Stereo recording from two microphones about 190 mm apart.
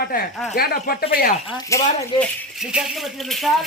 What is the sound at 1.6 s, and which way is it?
Speech, 15° left (ahead or behind).